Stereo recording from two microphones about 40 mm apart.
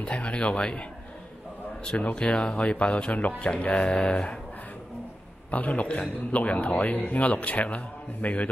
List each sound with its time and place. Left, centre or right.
0.0 s speech: left
1.9 s a man's voice: left
3.4 s speech: left
5.5 s a man's voice: left